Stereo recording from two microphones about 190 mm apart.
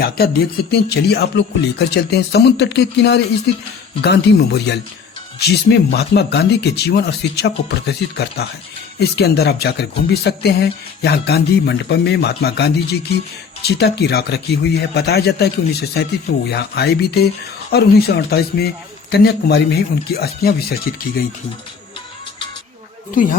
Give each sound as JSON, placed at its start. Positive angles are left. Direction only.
{"t": 0.7, "sound": "music", "side_deg": 60}